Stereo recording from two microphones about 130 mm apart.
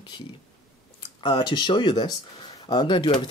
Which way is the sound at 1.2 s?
35° left (ahead or behind).